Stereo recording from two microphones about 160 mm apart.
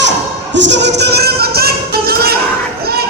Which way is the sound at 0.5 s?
90° right.